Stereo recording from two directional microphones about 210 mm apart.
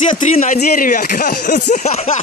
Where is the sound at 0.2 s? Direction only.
35° left (ahead or behind).